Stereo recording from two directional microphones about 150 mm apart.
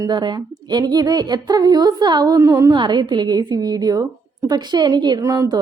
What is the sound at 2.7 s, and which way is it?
A woman's voice, 30° right (ahead or behind).